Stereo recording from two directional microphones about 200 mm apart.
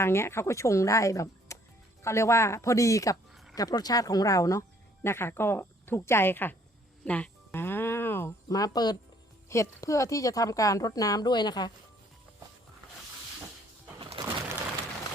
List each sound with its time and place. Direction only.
0.0 s speech: 10° left (ahead or behind)
7.0 s music: 5° left (ahead or behind)
9.5 s speech: 15° left (ahead or behind)
14.0 s pigeon: 25° right (ahead or behind)